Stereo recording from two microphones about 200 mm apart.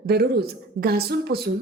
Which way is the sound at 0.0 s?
50° right (ahead or behind).